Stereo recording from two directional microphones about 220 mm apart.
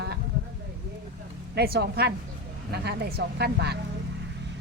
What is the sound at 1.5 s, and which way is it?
Speech, 45° right (ahead or behind).